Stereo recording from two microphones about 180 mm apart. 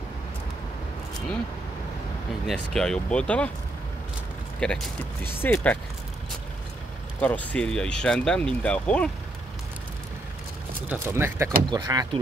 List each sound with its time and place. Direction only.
2.4 s speech: 5° left (ahead or behind)
4.6 s speech: 5° left (ahead or behind)
7.2 s speech: 10° left (ahead or behind)
10.9 s speech: 10° right (ahead or behind)